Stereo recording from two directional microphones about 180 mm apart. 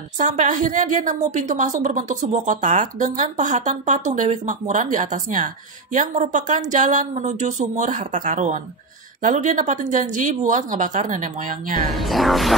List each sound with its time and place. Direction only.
0.2 s a woman's voice: 45° right (ahead or behind)
11.9 s speech: centre (ahead or behind)